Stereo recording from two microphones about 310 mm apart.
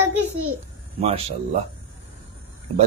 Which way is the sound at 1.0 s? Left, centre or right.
Centre.